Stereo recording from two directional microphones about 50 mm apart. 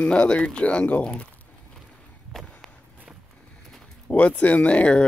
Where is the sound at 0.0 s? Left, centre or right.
Left.